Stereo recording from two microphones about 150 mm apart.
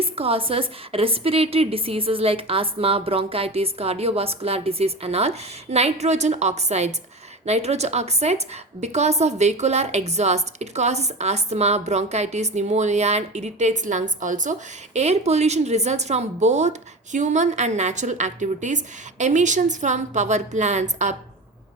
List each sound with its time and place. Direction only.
0.0 s a woman's voice: 40° right (ahead or behind); by 14.5 s 60° right (ahead or behind)
14.9 s a woman's voice: 45° right (ahead or behind)